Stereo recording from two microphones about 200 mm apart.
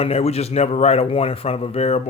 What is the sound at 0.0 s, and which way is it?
Speech, 30° left (ahead or behind).